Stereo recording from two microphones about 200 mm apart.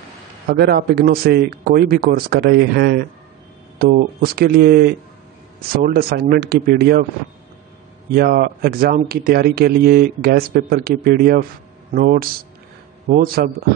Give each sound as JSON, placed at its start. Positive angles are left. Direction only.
{"t": 0.5, "sound": "speech", "side_deg": -50}
{"t": 8.1, "sound": "speech", "side_deg": -50}